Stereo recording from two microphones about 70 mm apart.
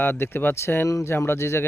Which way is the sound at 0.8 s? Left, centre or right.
Left.